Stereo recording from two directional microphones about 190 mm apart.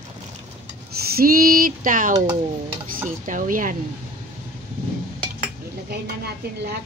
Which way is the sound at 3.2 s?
45° right (ahead or behind).